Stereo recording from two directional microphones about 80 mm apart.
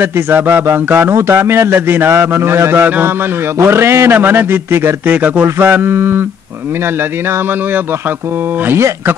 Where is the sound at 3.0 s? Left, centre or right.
Right.